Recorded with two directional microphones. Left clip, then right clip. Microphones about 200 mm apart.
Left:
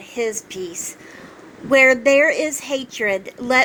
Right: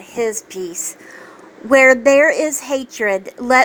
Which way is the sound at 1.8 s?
10° right (ahead or behind).